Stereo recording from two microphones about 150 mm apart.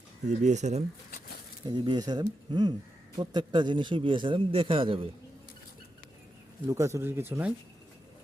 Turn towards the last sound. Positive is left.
turn(degrees=-15)  # may be behind; listen again after turning